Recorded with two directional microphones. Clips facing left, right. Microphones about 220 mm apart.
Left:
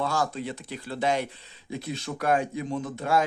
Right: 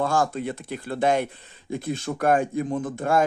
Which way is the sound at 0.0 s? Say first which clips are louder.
Right 4 dB; 50° right (ahead or behind).